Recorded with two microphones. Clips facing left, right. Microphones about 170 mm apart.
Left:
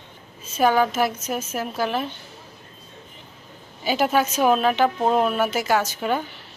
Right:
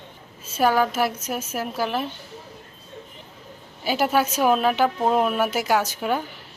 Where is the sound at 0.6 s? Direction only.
5° right (ahead or behind).